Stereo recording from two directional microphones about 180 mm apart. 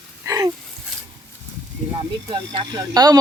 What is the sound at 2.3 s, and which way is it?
Speech, 25° right (ahead or behind).